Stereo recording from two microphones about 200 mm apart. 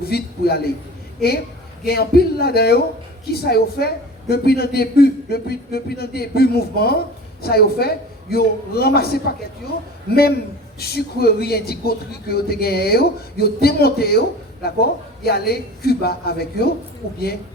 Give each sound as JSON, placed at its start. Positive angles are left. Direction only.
{"t": 0.0, "sound": "a man's voice", "side_deg": 50}
{"t": 1.8, "sound": "a man's voice", "side_deg": 50}